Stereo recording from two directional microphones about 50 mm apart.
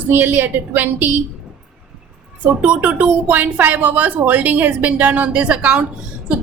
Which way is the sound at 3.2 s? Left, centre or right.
Right.